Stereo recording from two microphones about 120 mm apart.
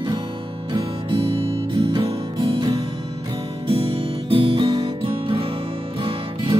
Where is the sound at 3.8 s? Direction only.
50° right (ahead or behind).